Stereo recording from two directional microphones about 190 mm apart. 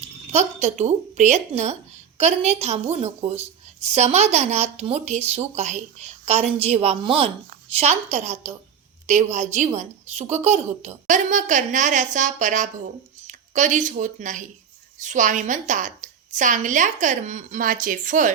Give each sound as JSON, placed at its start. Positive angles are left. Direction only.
{"t": 0.0, "sound": "a woman's voice", "side_deg": -35}